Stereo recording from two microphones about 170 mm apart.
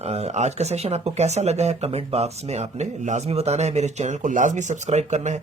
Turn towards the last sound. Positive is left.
turn(degrees=-45)  # may be behind; listen again after turning